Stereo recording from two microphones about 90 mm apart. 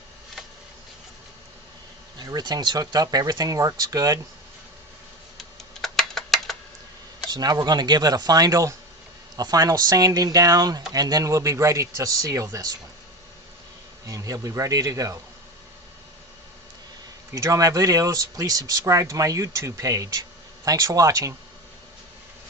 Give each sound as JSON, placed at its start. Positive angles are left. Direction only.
{"t": 2.1, "sound": "speech", "side_deg": -50}
{"t": 5.4, "sound": "tick-tock", "side_deg": 0}
{"t": 7.3, "sound": "speech", "side_deg": -45}
{"t": 14.1, "sound": "speech", "side_deg": -40}
{"t": 17.3, "sound": "speech", "side_deg": -35}